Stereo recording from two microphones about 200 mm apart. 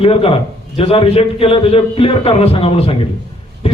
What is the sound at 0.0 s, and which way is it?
A man's voice, 30° left (ahead or behind).